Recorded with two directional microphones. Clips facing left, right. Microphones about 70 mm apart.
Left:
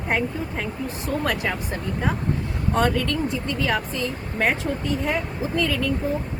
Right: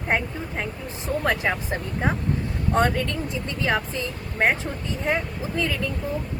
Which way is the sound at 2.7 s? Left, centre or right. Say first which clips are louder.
Left 1 dB; right.